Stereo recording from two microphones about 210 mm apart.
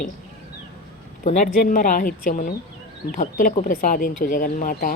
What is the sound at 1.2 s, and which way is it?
Speech, 35° left (ahead or behind).